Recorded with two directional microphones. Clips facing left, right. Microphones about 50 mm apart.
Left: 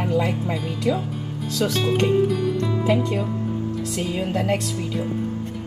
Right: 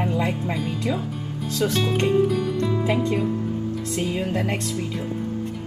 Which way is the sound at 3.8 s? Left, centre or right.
Right.